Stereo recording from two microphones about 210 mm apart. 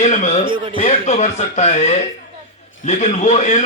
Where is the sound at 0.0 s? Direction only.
35° left (ahead or behind).